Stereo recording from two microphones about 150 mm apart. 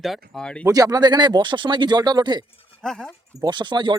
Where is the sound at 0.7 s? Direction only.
25° right (ahead or behind).